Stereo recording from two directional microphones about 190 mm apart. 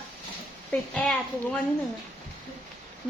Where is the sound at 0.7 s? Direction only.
5° left (ahead or behind).